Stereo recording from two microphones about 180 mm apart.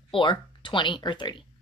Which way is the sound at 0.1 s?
25° left (ahead or behind).